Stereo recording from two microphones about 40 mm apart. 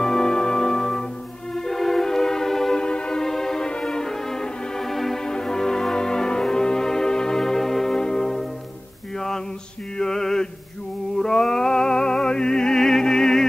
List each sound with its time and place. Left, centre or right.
0.0 s music: centre
2.8 s music: left; by 5.2 s centre
5.2 s music: centre
9.9 s a sound: centre
11.2 s music: centre